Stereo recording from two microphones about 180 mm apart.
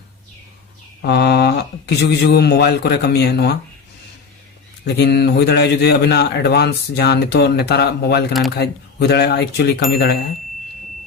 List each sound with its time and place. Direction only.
1.0 s speech: 70° left (ahead or behind)
4.9 s a man's voice: 70° left (ahead or behind)
8.3 s speech: centre (ahead or behind)
8.5 s speech: 65° left (ahead or behind)